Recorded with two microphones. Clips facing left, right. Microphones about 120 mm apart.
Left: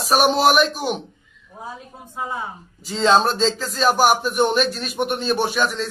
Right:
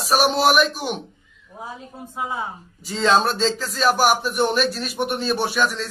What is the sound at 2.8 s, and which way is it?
A man's voice, centre (ahead or behind).